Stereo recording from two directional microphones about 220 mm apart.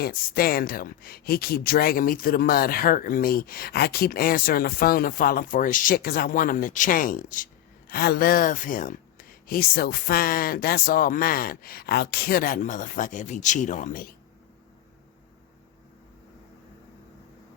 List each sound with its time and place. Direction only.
0.0 s speech: 45° left (ahead or behind)